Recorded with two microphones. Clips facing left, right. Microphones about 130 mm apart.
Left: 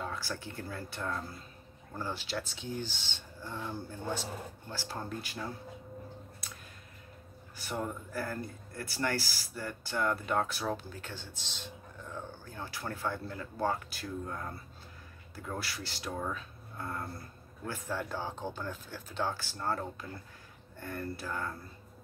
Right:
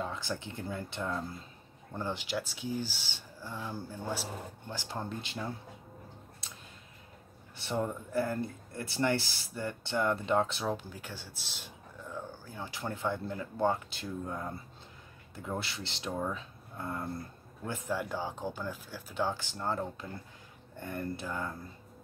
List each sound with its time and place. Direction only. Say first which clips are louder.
0.0 s speech: right 2 dB; 20° right (ahead or behind)
6.4 s a sound: left 2 dB; 25° right (ahead or behind)
7.5 s speech: right 3 dB; 25° right (ahead or behind)